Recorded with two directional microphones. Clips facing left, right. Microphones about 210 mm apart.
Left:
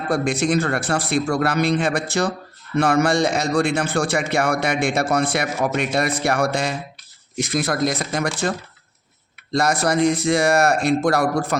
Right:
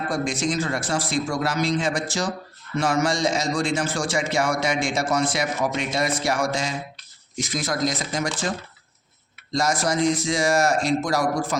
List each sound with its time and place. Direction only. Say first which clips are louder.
0.1 s a man's voice: left 7 dB; 60° left (ahead or behind)
9.5 s a man's voice: left 3 dB; 60° left (ahead or behind)